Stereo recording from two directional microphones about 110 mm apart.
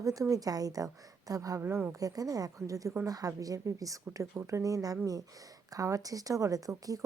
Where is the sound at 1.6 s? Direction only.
20° right (ahead or behind).